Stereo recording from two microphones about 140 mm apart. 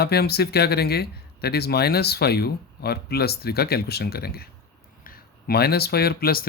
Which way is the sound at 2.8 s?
90° left.